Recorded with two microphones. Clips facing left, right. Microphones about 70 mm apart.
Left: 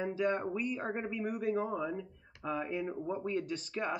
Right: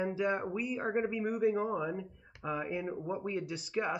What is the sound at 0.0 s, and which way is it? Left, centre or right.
Speech, centre.